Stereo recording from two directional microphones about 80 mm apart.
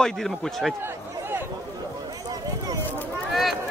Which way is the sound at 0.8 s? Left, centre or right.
Right.